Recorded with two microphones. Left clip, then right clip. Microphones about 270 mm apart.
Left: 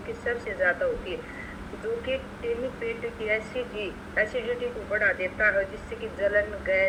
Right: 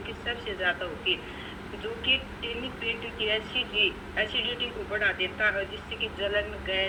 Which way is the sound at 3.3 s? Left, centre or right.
Centre.